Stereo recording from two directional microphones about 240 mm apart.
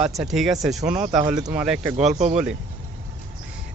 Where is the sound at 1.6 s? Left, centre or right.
Centre.